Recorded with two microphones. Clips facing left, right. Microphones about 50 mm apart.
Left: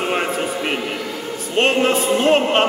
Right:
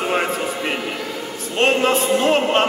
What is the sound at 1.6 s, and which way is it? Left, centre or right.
A man's voice, centre.